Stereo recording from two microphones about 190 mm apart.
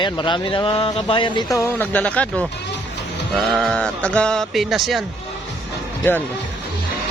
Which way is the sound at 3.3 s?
Centre (ahead or behind).